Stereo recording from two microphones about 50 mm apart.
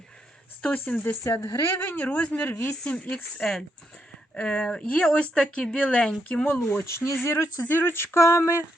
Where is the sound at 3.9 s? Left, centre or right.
Left.